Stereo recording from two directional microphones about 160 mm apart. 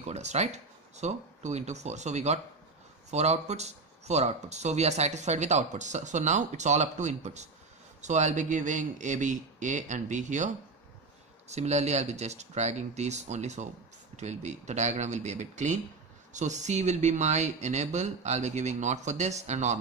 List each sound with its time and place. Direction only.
0.0 s speech: 45° right (ahead or behind)